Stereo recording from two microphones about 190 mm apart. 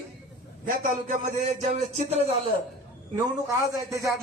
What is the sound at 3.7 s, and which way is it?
Speech, 15° right (ahead or behind).